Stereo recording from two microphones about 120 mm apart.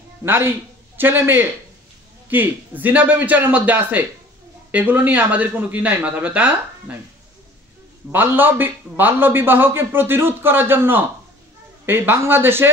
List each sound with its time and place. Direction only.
0.2 s a man's voice: 20° right (ahead or behind)
8.1 s a man's voice: 15° right (ahead or behind)